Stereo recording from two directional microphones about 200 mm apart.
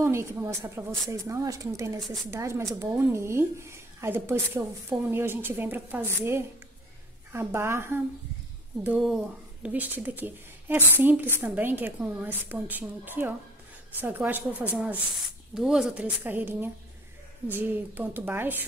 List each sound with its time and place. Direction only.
0.0 s speech: 15° right (ahead or behind)